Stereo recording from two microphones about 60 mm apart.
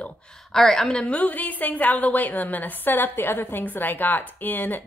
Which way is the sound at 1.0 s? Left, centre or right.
Left.